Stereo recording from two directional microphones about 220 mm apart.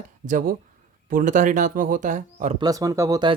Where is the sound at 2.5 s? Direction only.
15° right (ahead or behind).